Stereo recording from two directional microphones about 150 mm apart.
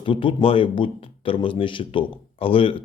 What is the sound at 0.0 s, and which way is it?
Speech, 35° left (ahead or behind).